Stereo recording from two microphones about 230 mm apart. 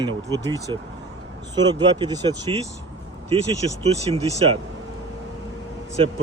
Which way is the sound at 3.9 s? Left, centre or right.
Right.